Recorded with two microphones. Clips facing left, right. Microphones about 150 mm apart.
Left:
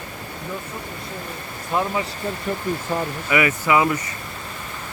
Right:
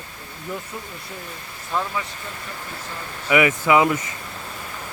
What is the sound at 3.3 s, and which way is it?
Speech, 15° right (ahead or behind).